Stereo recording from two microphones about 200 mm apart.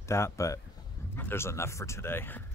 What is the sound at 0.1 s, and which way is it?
Speech, 15° left (ahead or behind).